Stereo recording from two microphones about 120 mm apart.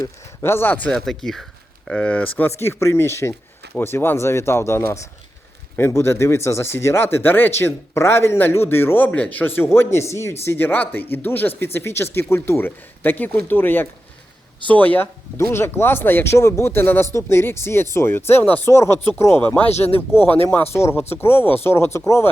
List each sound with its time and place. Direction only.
0.4 s speech: 20° left (ahead or behind)
0.9 s speech: 5° left (ahead or behind)
19.7 s speech: 60° left (ahead or behind)
20.0 s speech: 15° left (ahead or behind)